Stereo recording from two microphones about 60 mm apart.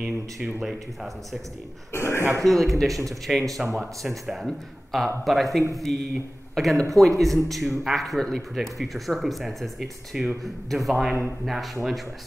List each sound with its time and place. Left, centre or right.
0.0 s speech: centre
0.6 s speech: centre
1.9 s speech: left
2.4 s speech: centre